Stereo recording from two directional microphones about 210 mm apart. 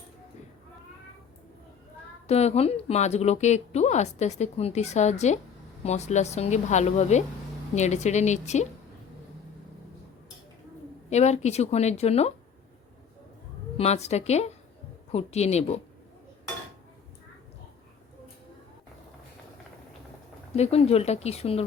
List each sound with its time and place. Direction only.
2.2 s a woman's voice: 30° left (ahead or behind)
11.1 s a woman's voice: 30° left (ahead or behind)
13.7 s a woman's voice: 30° left (ahead or behind)
20.6 s speech: 30° left (ahead or behind)